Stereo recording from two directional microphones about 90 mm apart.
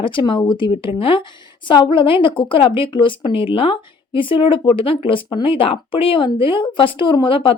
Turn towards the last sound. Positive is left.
turn(degrees=75)  # may be behind; listen again after turning